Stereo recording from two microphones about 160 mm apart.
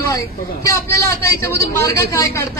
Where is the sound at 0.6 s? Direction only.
15° left (ahead or behind).